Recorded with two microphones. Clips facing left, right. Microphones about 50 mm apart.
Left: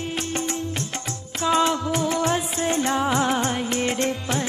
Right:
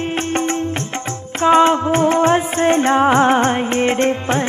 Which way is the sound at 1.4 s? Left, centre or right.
Right.